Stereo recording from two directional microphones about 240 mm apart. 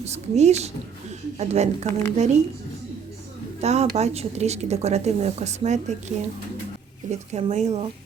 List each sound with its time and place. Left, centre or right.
0.0 s speech: right
3.6 s speech: right